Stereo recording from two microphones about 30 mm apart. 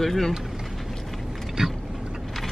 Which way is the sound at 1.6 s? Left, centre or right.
Centre.